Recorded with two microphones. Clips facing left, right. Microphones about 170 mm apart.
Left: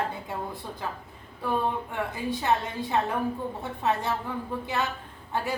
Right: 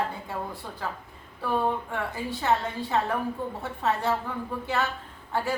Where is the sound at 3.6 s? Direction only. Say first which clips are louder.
Right 1 dB; 15° left (ahead or behind).